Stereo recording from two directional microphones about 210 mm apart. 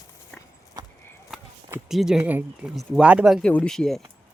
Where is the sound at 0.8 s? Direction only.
20° right (ahead or behind).